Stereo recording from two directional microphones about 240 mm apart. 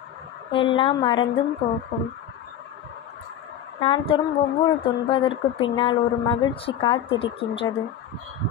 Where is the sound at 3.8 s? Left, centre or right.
Left.